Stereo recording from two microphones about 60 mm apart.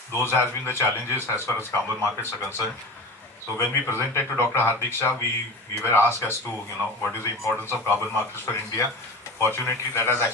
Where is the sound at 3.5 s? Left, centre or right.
Left.